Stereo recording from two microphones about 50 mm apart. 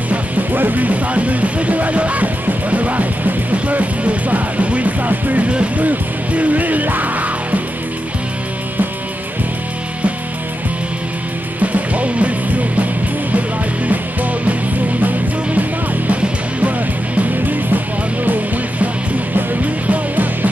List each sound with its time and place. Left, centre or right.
0.1 s speech: right
11.6 s music: right
15.0 s music: right
17.2 s music: right